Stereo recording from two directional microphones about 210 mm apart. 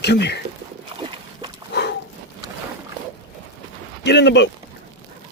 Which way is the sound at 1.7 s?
50° left (ahead or behind).